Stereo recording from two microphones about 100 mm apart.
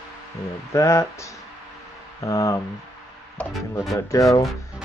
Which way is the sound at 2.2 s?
35° left (ahead or behind).